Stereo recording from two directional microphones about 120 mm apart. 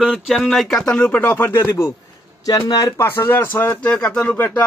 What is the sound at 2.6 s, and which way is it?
Speech, 35° left (ahead or behind).